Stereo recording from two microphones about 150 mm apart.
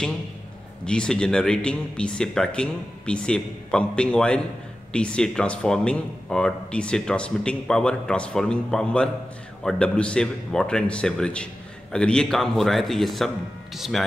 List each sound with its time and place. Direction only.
0.8 s speech: 5° left (ahead or behind)